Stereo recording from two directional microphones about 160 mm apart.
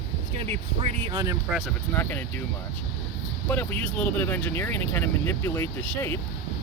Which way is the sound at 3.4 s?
10° left (ahead or behind).